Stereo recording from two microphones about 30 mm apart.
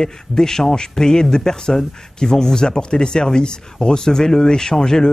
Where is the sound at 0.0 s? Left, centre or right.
Centre.